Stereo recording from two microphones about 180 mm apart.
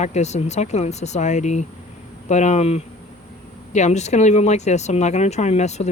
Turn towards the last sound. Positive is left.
turn(degrees=40)  # may be behind; listen again after turning